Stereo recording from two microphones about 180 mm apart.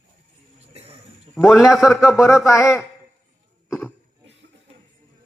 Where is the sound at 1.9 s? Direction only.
15° left (ahead or behind).